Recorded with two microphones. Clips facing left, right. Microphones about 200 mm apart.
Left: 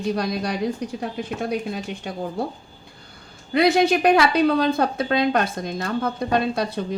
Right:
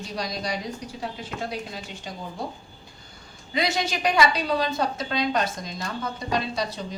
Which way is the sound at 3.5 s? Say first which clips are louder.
Left 9 dB; 55° left (ahead or behind).